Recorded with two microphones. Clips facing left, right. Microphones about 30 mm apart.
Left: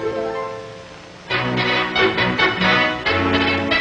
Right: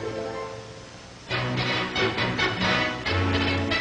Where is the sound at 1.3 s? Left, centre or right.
Left.